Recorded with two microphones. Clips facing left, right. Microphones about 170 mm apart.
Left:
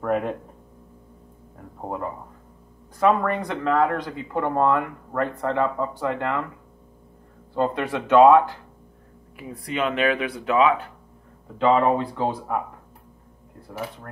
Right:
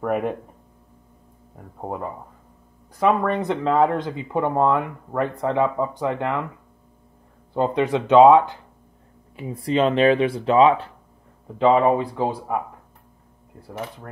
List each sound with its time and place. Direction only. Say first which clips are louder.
0.0 s speech: right 1 dB; 10° right (ahead or behind)
1.8 s speech: right 1 dB; 5° right (ahead or behind)
3.0 s speech: right 1 dB; 20° right (ahead or behind)
7.5 s speech: right 3 dB; 20° right (ahead or behind)
11.6 s speech: right 2 dB; 15° right (ahead or behind)